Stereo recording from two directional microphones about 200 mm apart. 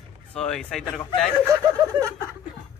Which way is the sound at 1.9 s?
20° right (ahead or behind).